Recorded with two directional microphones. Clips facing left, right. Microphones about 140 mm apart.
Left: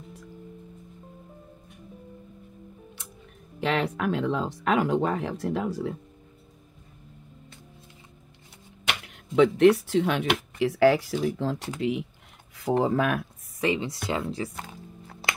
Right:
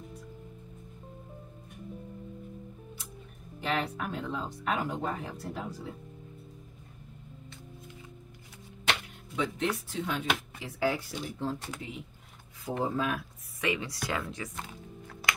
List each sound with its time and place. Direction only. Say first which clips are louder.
3.6 s speech: left 6 dB; 90° left
9.0 s speech: left 13 dB; 70° left (ahead or behind)
13.6 s speech: left 6 dB; 25° left (ahead or behind)